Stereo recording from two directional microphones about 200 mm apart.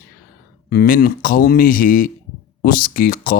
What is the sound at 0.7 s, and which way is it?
Speech, 50° left (ahead or behind).